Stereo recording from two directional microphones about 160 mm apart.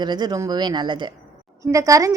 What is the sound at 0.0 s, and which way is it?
A woman's voice, 25° right (ahead or behind).